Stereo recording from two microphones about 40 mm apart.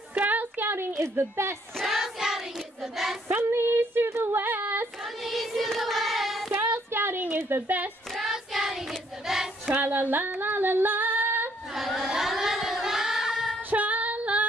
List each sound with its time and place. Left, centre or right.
0.2 s a sound: right
0.7 s a woman's voice: right
1.9 s child singing: centre
3.3 s child singing: right
3.5 s female singing: right
5.2 s music: centre
6.7 s a sound: right
7.6 s a child's voice: right
8.2 s child singing: centre
9.8 s speech: right
10.4 s female singing: right
11.7 s child singing: centre
13.7 s female singing: right